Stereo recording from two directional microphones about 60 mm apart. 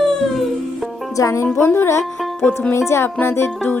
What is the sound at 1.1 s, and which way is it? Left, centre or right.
Speech, left.